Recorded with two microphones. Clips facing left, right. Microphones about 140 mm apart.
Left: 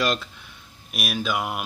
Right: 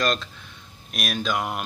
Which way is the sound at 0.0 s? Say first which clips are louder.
Even; 10° left (ahead or behind).